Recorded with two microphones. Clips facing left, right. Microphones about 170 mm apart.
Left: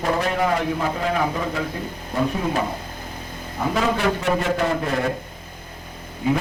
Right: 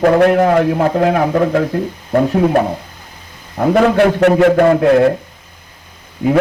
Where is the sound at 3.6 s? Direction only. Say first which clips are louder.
Right 10 dB; 60° right (ahead or behind).